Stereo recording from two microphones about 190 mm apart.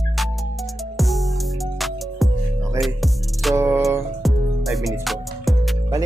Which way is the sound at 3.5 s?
15° right (ahead or behind).